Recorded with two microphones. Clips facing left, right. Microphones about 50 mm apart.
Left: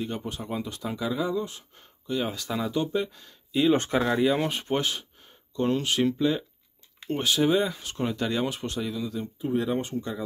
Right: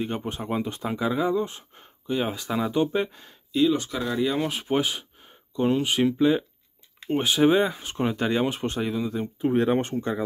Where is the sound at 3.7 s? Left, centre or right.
Left.